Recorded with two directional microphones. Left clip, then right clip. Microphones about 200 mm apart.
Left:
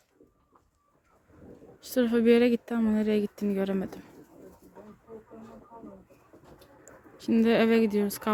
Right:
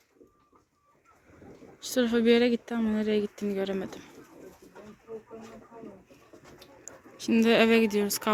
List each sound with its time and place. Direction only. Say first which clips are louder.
1.8 s speech: even; 20° left (ahead or behind)
7.2 s speech: right 1 dB; 15° left (ahead or behind)